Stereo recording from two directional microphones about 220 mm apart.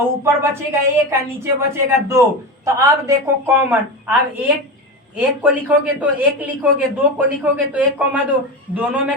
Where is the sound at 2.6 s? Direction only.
15° right (ahead or behind).